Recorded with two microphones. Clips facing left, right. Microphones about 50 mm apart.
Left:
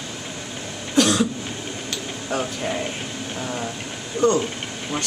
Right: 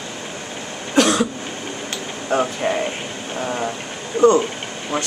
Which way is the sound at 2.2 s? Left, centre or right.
Right.